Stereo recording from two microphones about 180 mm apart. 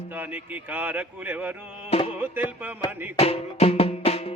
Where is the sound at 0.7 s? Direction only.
10° right (ahead or behind).